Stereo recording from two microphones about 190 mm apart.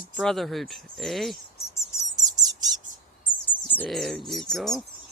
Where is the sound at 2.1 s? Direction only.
20° right (ahead or behind).